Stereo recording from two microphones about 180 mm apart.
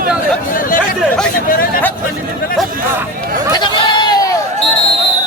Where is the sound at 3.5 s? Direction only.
25° left (ahead or behind).